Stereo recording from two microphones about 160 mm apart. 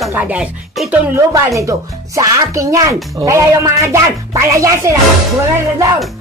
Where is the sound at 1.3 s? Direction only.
20° right (ahead or behind).